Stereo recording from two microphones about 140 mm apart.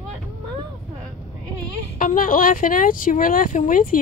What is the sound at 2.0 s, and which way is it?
Speech, 75° left (ahead or behind).